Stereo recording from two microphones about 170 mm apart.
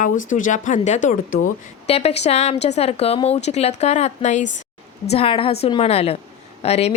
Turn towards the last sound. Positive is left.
turn(degrees=40)  # may be behind; listen again after turning